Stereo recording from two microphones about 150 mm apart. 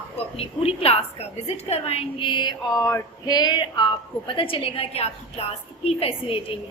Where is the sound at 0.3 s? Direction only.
40° left (ahead or behind).